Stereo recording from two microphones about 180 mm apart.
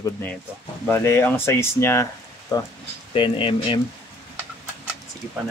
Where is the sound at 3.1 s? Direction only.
30° left (ahead or behind).